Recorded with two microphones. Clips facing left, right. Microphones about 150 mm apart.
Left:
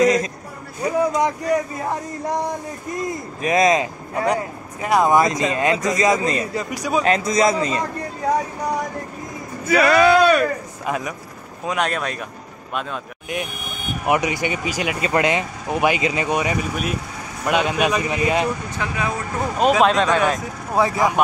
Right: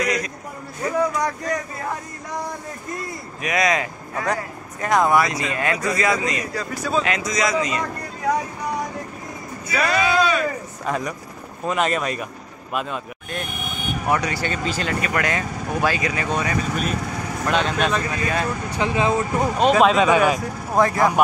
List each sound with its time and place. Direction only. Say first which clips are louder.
0.0 s a sound: left 7 dB; 25° left (ahead or behind)
0.8 s speech: left 3 dB; 20° left (ahead or behind)
3.4 s speech: left 5 dB; 25° left (ahead or behind)
7.1 s a man's voice: left 5 dB; 30° left (ahead or behind)
9.8 s speech: left 6 dB; 60° left (ahead or behind)
10.9 s speech: even; 5° left (ahead or behind)
14.0 s speech: left 3 dB; 20° left (ahead or behind)
18.8 s speech: right 10 dB; 25° right (ahead or behind)
19.6 s speech: even; centre (ahead or behind)
20.7 s speech: right 1 dB; 10° left (ahead or behind)